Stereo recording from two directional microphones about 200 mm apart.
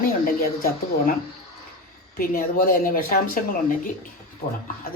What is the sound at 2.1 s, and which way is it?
A woman's voice, 45° left (ahead or behind).